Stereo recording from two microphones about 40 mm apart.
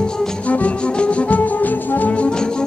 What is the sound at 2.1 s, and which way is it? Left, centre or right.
Brass instrument, left.